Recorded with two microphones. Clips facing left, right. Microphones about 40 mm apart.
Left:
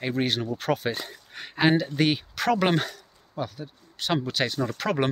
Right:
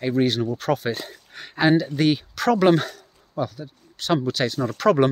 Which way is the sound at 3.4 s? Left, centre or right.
Left.